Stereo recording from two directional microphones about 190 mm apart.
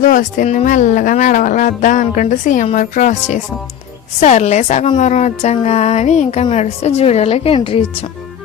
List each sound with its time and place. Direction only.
0.0 s speech: 45° left (ahead or behind)